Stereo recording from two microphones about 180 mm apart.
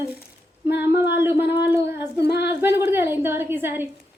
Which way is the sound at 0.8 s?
10° right (ahead or behind).